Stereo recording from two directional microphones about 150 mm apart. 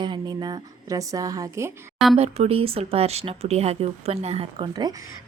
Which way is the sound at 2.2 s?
40° right (ahead or behind).